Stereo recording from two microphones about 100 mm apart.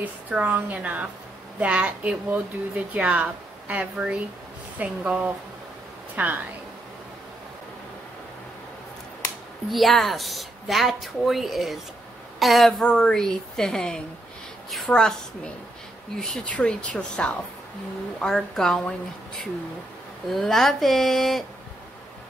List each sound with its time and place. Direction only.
0.0 s speech: 15° right (ahead or behind)
9.7 s a woman's voice: centre (ahead or behind)